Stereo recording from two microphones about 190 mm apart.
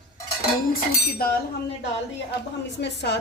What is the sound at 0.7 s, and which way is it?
Speech, 50° left (ahead or behind).